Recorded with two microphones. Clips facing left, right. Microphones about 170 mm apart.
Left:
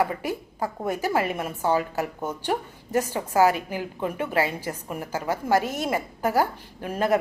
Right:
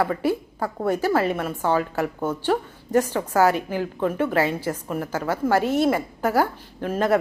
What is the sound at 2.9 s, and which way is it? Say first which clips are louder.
A woman's voice: right 3 dB; 10° left (ahead or behind).